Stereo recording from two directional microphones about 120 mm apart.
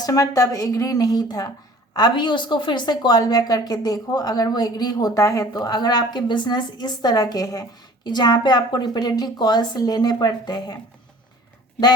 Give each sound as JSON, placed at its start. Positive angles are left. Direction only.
{"t": 0.0, "sound": "speech", "side_deg": 30}